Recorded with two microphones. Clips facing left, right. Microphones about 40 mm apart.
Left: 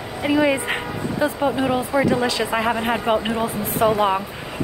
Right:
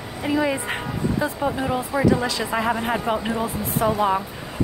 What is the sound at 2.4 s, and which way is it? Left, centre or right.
Speech, left.